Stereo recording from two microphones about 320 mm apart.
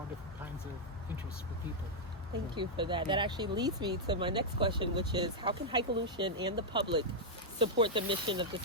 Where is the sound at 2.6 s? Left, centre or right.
Centre.